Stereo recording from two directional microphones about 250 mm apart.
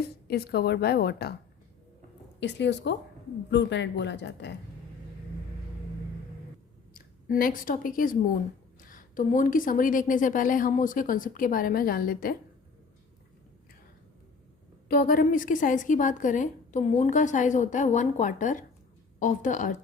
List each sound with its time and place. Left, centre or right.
0.3 s a woman's voice: left
2.4 s speech: left
6.9 s a woman's voice: left
14.8 s a woman's voice: left